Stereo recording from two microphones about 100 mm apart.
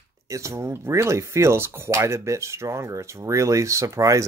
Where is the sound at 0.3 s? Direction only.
30° right (ahead or behind).